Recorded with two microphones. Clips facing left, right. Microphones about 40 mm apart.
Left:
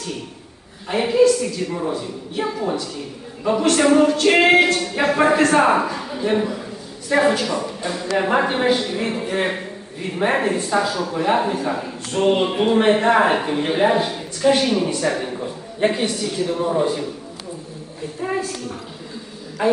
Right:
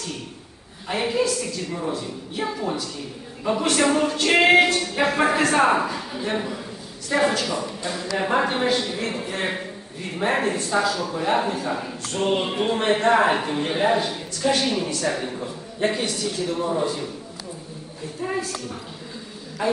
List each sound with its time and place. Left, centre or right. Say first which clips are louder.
0.8 s a man's voice: left 7 dB; centre
12.1 s a man's voice: left 5 dB; centre
15.1 s a man's voice: left 3 dB; centre
18.2 s a woman's voice: left 3 dB; left
19.6 s a woman's voice: left 5 dB; left